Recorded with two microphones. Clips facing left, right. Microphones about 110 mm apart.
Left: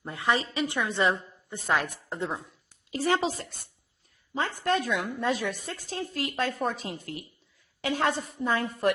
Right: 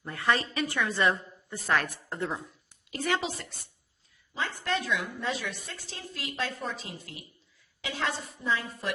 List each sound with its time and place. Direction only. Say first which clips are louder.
0.0 s a woman's voice: left 1 dB; 20° left (ahead or behind)
2.9 s a woman's voice: left 4 dB; 35° left (ahead or behind); by 8.9 s 55° left (ahead or behind)